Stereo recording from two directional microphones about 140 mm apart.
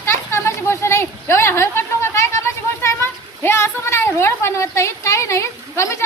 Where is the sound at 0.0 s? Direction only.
15° left (ahead or behind).